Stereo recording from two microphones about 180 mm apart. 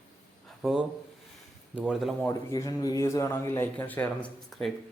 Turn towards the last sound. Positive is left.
turn(degrees=5)  # may be behind; listen again after turning